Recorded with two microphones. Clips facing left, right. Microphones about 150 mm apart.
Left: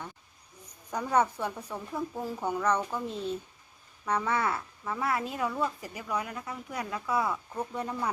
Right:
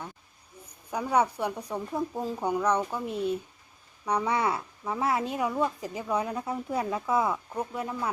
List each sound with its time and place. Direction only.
0.9 s a woman's voice: 10° right (ahead or behind)
7.6 s speech: 5° right (ahead or behind)